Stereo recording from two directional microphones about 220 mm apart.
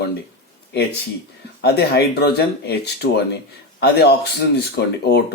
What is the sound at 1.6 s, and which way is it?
Speech, 45° left (ahead or behind).